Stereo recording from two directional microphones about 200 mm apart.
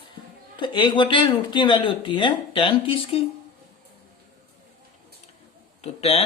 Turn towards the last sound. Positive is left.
turn(degrees=30)  # may be behind; listen again after turning